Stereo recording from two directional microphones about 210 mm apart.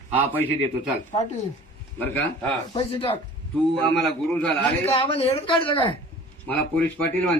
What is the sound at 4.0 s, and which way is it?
Speech, centre (ahead or behind).